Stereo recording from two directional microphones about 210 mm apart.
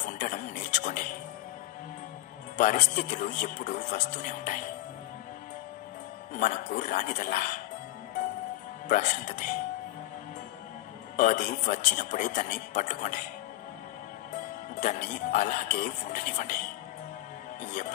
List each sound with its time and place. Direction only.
0.2 s music: 35° left (ahead or behind)
2.5 s speech: 35° left (ahead or behind)
6.3 s speech: 40° left (ahead or behind)
8.8 s speech: 35° left (ahead or behind)
11.1 s speech: 35° left (ahead or behind)
14.8 s speech: 35° left (ahead or behind)